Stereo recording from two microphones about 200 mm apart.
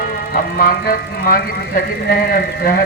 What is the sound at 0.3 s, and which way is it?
Speech, 50° left (ahead or behind).